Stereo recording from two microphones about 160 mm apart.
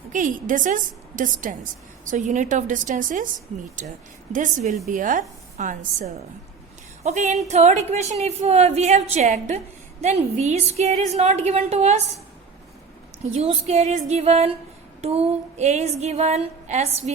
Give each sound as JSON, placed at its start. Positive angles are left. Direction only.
{"t": 0.1, "sound": "a woman's voice", "side_deg": -55}
{"t": 13.3, "sound": "a woman's voice", "side_deg": -40}